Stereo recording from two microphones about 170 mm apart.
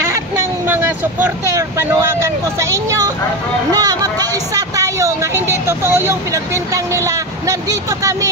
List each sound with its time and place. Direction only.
0.0 s speech: 15° right (ahead or behind)